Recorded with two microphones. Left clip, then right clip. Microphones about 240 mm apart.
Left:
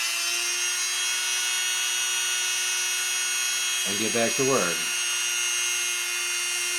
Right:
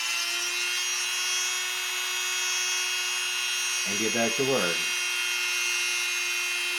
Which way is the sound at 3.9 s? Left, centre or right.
Centre.